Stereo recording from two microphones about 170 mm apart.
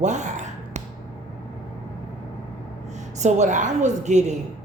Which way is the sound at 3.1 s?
45° right (ahead or behind).